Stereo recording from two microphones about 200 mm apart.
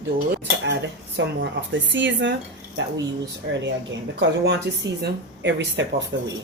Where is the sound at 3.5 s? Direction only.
65° right (ahead or behind).